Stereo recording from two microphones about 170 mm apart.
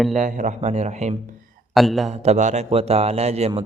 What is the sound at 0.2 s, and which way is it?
Speech, 50° right (ahead or behind).